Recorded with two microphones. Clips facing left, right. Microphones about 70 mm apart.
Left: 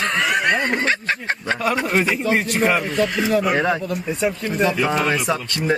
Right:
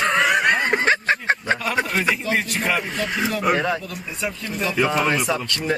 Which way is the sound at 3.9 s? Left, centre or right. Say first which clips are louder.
Left 7 dB; left.